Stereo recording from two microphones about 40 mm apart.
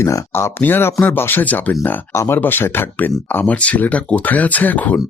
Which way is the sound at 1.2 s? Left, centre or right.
Left.